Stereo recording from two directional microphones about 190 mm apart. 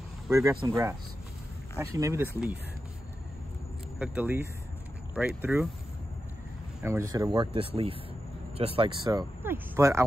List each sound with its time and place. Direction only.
0.3 s speech: 15° right (ahead or behind)
4.0 s speech: 10° right (ahead or behind)
6.8 s speech: 15° right (ahead or behind)
9.4 s speech: 15° right (ahead or behind)